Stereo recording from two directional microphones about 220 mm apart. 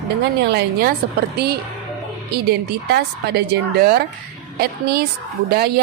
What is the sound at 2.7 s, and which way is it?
A woman's voice, 50° right (ahead or behind).